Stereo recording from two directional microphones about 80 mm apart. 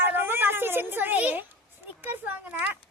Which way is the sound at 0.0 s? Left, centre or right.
Right.